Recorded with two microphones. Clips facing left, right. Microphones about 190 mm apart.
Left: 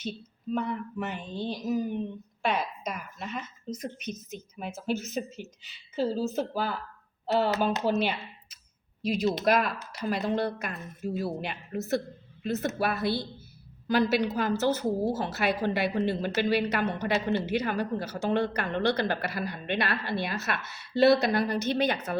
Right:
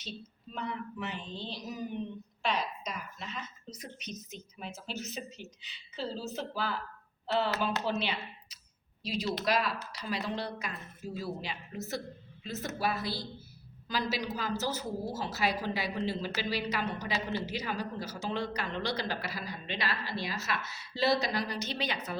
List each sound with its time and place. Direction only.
0.0 s speech: 55° left (ahead or behind)
7.9 s a woman's voice: 50° left (ahead or behind)